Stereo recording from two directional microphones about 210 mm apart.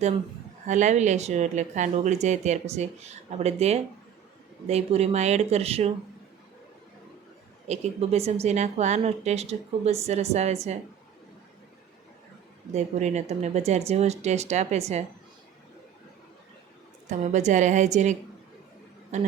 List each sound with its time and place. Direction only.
0.7 s speech: 35° right (ahead or behind)
7.7 s speech: 30° right (ahead or behind)
12.7 s speech: 35° right (ahead or behind)
17.1 s speech: 35° right (ahead or behind)